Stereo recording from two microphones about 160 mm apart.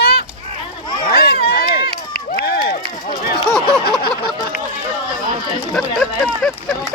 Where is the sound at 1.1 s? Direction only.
75° left (ahead or behind).